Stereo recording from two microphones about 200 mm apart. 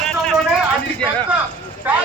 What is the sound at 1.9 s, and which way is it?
Speech, 10° right (ahead or behind).